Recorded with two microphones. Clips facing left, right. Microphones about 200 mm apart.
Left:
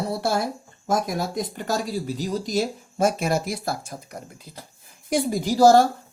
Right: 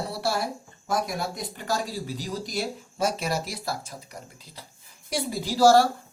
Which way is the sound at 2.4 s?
20° left (ahead or behind).